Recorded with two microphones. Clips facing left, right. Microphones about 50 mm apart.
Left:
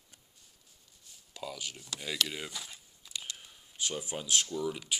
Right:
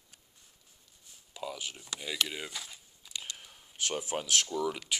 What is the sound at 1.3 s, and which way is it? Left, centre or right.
Speech, right.